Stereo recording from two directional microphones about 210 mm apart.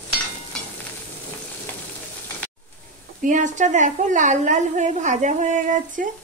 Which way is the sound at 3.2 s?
35° right (ahead or behind).